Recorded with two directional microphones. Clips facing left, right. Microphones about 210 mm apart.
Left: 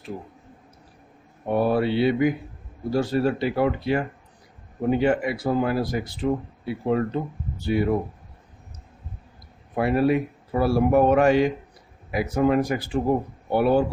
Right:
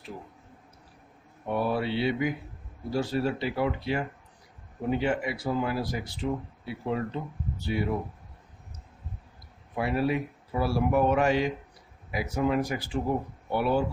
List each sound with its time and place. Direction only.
1.4 s speech: 50° left (ahead or behind)
9.8 s speech: 55° left (ahead or behind)